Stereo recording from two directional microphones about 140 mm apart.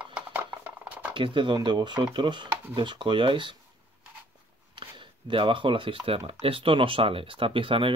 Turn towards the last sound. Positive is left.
turn(degrees=-40)  # may be behind; listen again after turning